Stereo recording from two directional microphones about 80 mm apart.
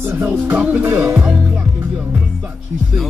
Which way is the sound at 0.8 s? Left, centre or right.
Right.